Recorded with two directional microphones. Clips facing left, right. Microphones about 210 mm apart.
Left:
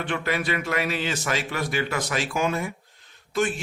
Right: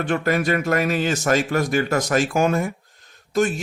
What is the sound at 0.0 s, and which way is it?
Speech, 45° right (ahead or behind).